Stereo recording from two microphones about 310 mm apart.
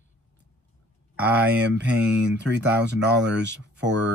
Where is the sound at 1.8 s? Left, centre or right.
Right.